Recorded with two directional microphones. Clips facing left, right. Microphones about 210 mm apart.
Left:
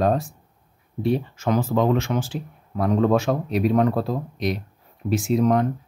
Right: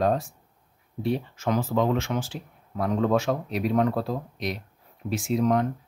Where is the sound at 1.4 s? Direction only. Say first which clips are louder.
Left 3 dB; 50° left (ahead or behind).